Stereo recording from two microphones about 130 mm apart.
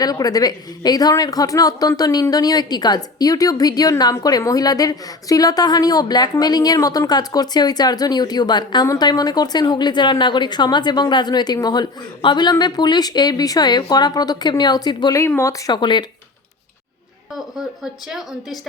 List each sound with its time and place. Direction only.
0.0 s a woman's voice: 30° left (ahead or behind)
15.7 s a woman's voice: 35° left (ahead or behind)
17.8 s a woman's voice: centre (ahead or behind)